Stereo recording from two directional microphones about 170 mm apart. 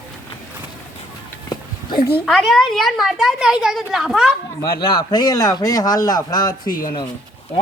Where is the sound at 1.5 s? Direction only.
25° left (ahead or behind).